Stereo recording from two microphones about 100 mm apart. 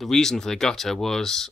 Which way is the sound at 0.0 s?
5° left (ahead or behind).